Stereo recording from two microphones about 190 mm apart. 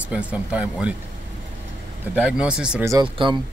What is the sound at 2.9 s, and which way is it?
Speech, 20° right (ahead or behind).